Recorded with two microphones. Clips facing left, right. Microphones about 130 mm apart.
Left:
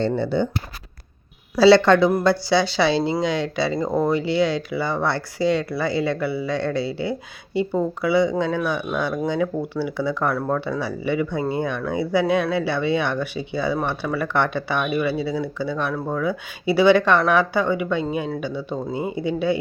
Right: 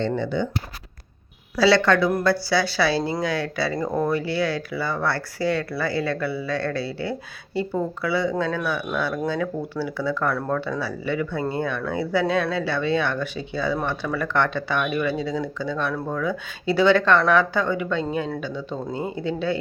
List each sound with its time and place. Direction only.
0.0 s speech: 35° left (ahead or behind)
1.5 s speech: 30° left (ahead or behind)